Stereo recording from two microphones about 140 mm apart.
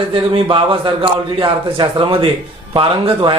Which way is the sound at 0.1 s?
40° right (ahead or behind).